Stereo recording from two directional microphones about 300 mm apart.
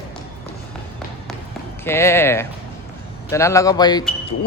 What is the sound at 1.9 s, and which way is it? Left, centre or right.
A man's voice, centre.